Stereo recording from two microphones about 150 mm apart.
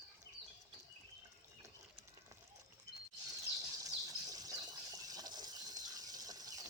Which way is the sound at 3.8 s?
25° right (ahead or behind).